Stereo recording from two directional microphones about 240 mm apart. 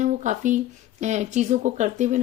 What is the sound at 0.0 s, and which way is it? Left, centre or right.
Speech, right.